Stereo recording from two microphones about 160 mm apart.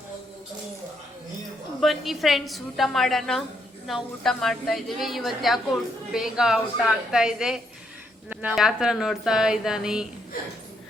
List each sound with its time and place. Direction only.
1.8 s speech: centre (ahead or behind)